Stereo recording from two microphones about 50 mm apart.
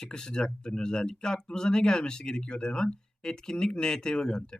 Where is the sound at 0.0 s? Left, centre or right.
Centre.